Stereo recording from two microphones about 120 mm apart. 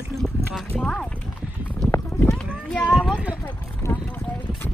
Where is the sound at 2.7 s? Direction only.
10° left (ahead or behind).